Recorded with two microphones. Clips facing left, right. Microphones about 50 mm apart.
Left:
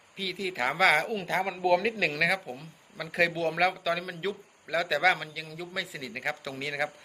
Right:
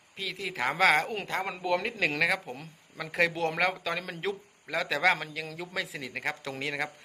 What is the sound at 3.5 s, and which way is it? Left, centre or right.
A man's voice, right.